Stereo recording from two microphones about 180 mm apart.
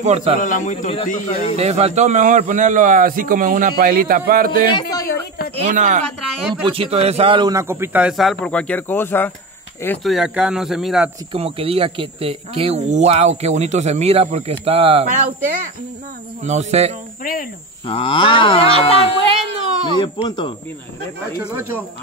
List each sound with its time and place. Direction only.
0.0 s speech: 35° right (ahead or behind)
0.4 s speech: 45° left (ahead or behind)
1.6 s a man's voice: 35° right (ahead or behind); by 4.5 s 55° right (ahead or behind)
4.6 s speech: 25° left (ahead or behind)
5.6 s a man's voice: 45° right (ahead or behind)
6.5 s a man's voice: 30° right (ahead or behind); by 9.3 s 10° left (ahead or behind)
10.0 s speech: 5° right (ahead or behind)
11.3 s speech: 30° right (ahead or behind)
16.4 s speech: 40° right (ahead or behind)
17.2 s speech: 50° left (ahead or behind)
17.8 s speech: 30° left (ahead or behind)
19.2 s speech: 35° right (ahead or behind)
20.0 s speech: 25° left (ahead or behind)
21.5 s a man's voice: 10° right (ahead or behind)